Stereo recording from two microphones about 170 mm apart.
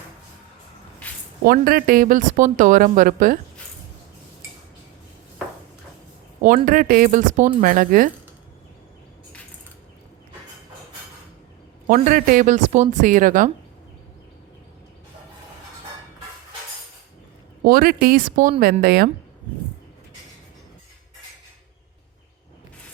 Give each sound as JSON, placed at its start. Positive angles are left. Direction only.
{"t": 1.5, "sound": "speech", "side_deg": -60}
{"t": 6.7, "sound": "speech", "side_deg": -55}
{"t": 11.9, "sound": "speech", "side_deg": -50}
{"t": 17.6, "sound": "speech", "side_deg": -60}